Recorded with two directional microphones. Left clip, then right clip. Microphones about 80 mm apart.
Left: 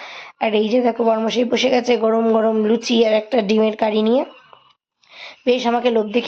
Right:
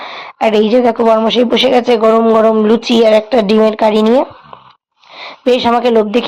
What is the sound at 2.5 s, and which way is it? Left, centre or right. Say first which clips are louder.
Speech: right 7 dB; right.